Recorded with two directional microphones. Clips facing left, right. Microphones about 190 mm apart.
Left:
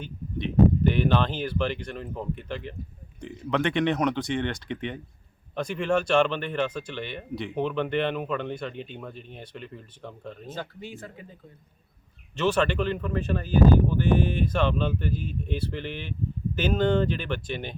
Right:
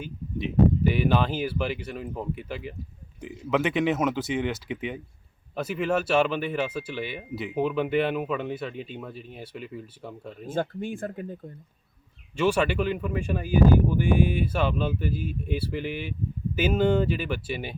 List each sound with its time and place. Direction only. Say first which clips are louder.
0.0 s speech: right 1 dB; 5° right (ahead or behind)
10.5 s speech: right 11 dB; 50° right (ahead or behind)
12.4 s speech: right 1 dB; 10° right (ahead or behind)